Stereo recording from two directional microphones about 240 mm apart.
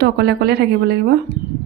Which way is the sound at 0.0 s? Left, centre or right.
Right.